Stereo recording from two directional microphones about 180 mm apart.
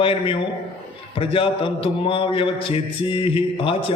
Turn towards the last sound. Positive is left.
turn(degrees=30)  # may be behind; listen again after turning